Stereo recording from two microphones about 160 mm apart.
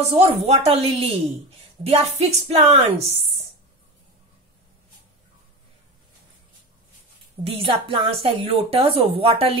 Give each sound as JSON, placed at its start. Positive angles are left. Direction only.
{"t": 0.1, "sound": "a woman's voice", "side_deg": -40}
{"t": 7.4, "sound": "a woman's voice", "side_deg": -35}